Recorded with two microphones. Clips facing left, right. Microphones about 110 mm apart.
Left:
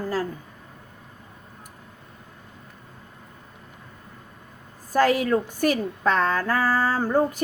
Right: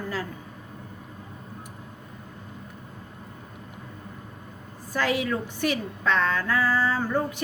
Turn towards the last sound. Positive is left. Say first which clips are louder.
# left 4 dB
turn(degrees=45)  # may be behind; listen again after turning